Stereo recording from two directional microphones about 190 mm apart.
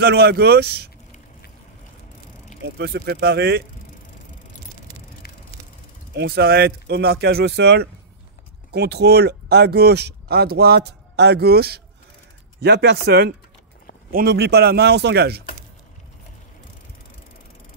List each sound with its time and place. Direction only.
0.0 s speech: 55° right (ahead or behind)
2.6 s speech: 60° right (ahead or behind)
6.1 s speech: 60° right (ahead or behind)